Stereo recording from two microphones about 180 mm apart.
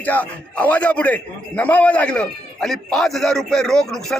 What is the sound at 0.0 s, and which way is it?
A man's voice, 10° left (ahead or behind).